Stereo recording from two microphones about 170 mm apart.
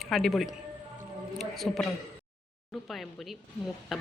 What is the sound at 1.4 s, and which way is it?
Speech, centre (ahead or behind).